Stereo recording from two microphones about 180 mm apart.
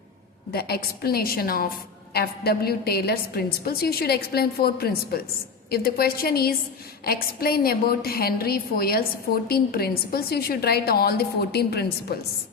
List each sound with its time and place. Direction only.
0.5 s a woman's voice: 60° left (ahead or behind)